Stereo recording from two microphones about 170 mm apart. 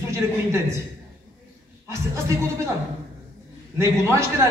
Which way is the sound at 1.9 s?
15° right (ahead or behind).